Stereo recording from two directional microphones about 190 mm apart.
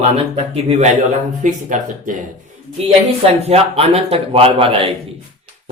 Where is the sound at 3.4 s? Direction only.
30° right (ahead or behind).